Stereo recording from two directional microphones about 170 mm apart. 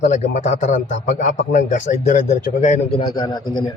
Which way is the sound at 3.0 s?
25° left (ahead or behind).